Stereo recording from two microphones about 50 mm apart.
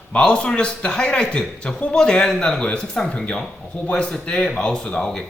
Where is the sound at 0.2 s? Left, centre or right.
Centre.